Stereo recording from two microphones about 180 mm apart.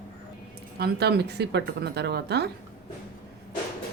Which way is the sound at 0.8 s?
65° right (ahead or behind).